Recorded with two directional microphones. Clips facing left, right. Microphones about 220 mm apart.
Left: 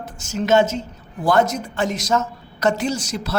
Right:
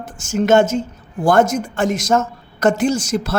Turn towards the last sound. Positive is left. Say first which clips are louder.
# right 6 dB
turn(degrees=-50)  # may be behind; listen again after turning